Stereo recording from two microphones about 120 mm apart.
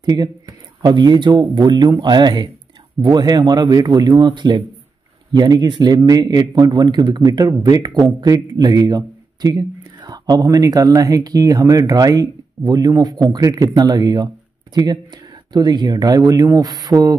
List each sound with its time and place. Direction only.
0.0 s a man's voice: 35° right (ahead or behind)